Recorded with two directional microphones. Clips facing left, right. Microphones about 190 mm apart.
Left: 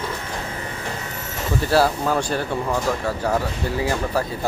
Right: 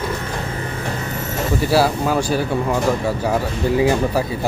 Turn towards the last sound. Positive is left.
turn(degrees=-15)  # may be behind; listen again after turning